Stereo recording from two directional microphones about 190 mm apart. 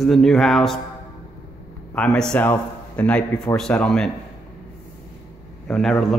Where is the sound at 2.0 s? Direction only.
5° left (ahead or behind).